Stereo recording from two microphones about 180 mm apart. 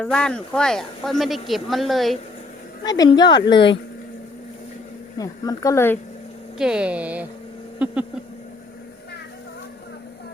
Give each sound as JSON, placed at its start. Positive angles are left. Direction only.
{"t": 0.0, "sound": "a man's voice", "side_deg": 5}
{"t": 2.8, "sound": "speech", "side_deg": 20}
{"t": 5.1, "sound": "speech", "side_deg": 20}
{"t": 6.6, "sound": "speech", "side_deg": -5}